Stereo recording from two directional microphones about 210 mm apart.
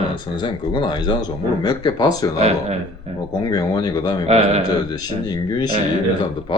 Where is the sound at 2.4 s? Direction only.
30° right (ahead or behind).